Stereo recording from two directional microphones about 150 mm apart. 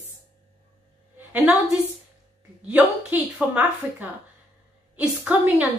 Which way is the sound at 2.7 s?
10° right (ahead or behind).